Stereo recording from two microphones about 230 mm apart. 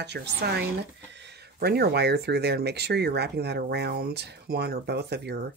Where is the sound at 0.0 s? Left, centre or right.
Right.